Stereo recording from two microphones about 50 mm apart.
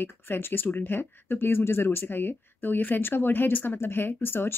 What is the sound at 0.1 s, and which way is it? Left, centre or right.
Speech, left.